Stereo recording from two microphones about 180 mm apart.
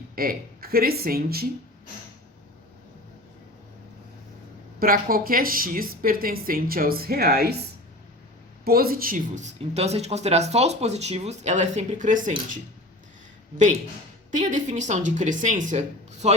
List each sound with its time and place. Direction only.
0.2 s a woman's voice: 55° right (ahead or behind)
4.8 s a woman's voice: 55° right (ahead or behind)
8.6 s speech: 55° right (ahead or behind)
14.3 s speech: 40° right (ahead or behind)